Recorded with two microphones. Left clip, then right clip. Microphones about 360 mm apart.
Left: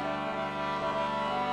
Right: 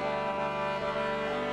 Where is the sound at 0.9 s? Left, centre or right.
Right.